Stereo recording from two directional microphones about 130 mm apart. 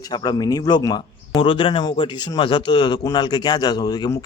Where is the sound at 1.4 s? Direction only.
45° left (ahead or behind).